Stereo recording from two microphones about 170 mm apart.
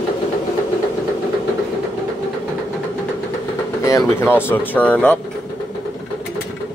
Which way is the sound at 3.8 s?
15° left (ahead or behind).